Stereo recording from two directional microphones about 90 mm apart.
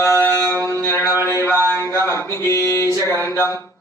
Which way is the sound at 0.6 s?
30° left (ahead or behind).